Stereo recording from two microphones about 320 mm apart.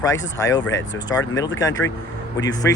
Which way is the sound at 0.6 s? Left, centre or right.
Left.